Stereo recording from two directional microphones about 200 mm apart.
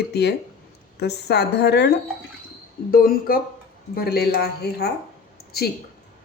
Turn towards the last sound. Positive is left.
turn(degrees=50)  # may be behind; listen again after turning